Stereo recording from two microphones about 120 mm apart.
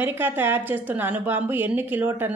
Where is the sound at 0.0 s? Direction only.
15° right (ahead or behind).